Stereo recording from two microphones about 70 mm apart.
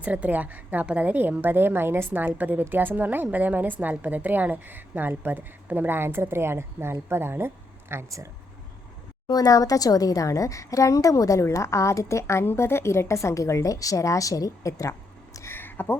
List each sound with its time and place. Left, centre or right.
0.0 s a woman's voice: right
9.2 s a woman's voice: left
15.5 s a sound: left